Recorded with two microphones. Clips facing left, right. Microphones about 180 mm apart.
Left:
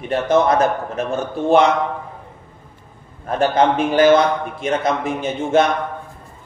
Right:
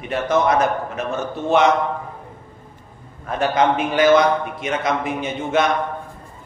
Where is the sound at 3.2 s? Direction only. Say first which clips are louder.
Left 2 dB; 35° left (ahead or behind).